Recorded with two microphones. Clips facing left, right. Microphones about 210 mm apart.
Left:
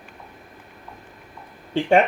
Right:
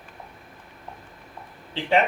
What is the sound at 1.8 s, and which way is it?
Speech, 50° left (ahead or behind).